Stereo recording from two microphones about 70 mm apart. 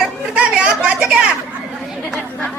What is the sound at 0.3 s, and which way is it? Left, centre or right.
Chatter, centre.